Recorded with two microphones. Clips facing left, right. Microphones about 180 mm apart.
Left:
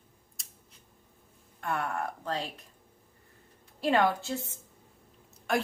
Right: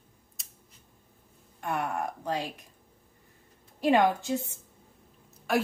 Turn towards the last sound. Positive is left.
turn(degrees=0)  # may be behind; listen again after turning